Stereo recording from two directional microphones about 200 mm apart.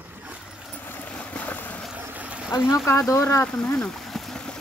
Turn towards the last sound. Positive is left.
turn(degrees=5)  # may be behind; listen again after turning